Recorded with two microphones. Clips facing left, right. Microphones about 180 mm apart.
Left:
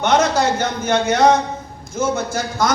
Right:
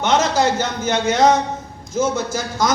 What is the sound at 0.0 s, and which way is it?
A man's voice, 60° left (ahead or behind).